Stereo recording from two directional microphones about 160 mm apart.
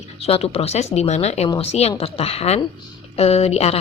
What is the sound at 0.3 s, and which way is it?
A woman's voice, 40° left (ahead or behind).